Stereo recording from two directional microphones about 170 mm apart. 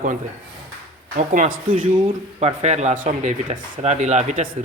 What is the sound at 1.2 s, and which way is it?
Speech, 50° right (ahead or behind).